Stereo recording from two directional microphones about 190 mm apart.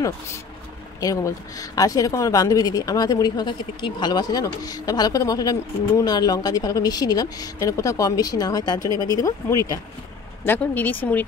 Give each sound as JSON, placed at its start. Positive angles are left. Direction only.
{"t": 1.0, "sound": "speech", "side_deg": 15}